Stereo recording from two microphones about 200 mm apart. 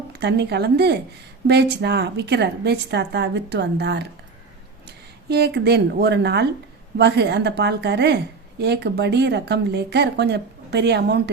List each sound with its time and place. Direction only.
0.2 s a woman's voice: 55° right (ahead or behind)
5.3 s a woman's voice: 55° right (ahead or behind)